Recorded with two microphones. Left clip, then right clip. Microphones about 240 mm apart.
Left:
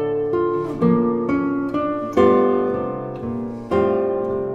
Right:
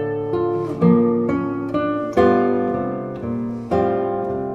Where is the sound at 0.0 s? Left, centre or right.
Left.